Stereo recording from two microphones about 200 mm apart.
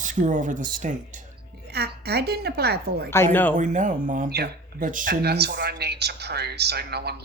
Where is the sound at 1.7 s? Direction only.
55° right (ahead or behind).